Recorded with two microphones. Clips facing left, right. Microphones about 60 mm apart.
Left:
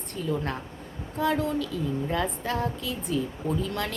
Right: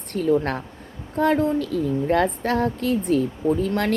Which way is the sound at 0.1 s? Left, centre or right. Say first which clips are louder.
Right 10 dB; right.